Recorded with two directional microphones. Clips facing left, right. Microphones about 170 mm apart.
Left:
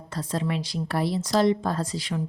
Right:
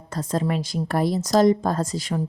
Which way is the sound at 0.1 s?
45° right (ahead or behind).